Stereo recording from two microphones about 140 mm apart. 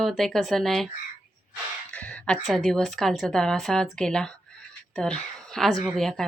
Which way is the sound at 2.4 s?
Centre (ahead or behind).